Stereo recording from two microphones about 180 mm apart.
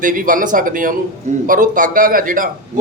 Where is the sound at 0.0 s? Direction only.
50° right (ahead or behind).